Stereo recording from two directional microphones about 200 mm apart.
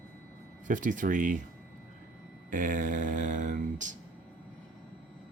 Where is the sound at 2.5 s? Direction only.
40° right (ahead or behind).